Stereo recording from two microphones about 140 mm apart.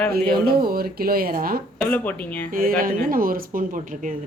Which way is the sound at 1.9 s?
10° left (ahead or behind).